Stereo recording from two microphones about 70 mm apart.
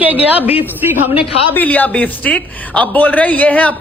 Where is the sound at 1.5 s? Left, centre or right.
Left.